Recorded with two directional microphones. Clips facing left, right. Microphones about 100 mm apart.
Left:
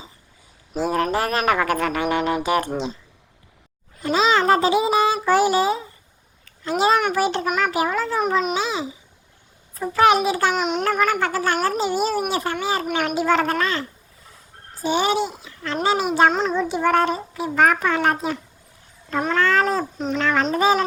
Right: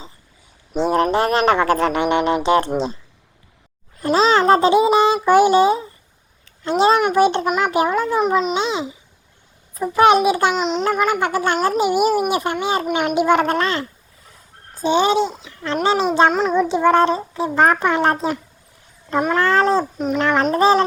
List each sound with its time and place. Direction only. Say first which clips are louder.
0.8 s speech: right 4 dB; 25° right (ahead or behind)
4.0 s a child's voice: right 3 dB; 35° right (ahead or behind)
10.5 s a child's voice: right 2 dB; 5° left (ahead or behind)
11.0 s speech: right 2 dB; 20° right (ahead or behind)
19.4 s cat: right 3 dB; 30° right (ahead or behind)
20.1 s speech: right 3 dB; 30° right (ahead or behind)